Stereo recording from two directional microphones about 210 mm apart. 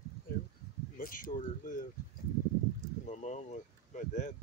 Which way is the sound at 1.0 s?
40° left (ahead or behind).